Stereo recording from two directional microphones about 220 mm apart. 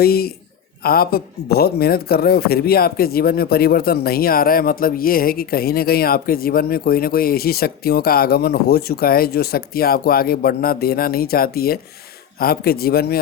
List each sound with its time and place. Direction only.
0.0 s a man's voice: 45° left (ahead or behind)